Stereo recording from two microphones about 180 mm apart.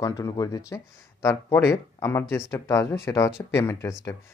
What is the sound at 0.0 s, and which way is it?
Speech, 20° left (ahead or behind).